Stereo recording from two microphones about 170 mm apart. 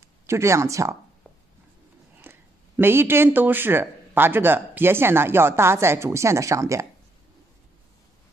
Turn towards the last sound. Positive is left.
turn(degrees=-20)  # may be behind; listen again after turning